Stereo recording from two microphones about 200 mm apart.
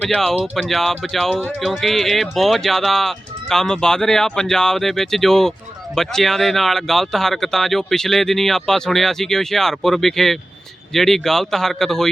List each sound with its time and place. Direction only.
0.0 s speech: 5° left (ahead or behind)